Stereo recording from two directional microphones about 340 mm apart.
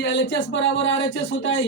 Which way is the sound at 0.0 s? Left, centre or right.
Left.